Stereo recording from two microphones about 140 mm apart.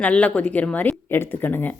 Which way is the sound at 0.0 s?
10° left (ahead or behind).